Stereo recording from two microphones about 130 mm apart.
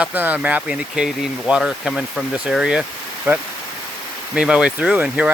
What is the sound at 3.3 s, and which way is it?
Speech, 15° right (ahead or behind).